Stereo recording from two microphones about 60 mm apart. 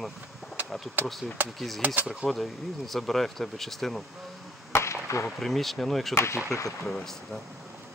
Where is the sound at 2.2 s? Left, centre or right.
Centre.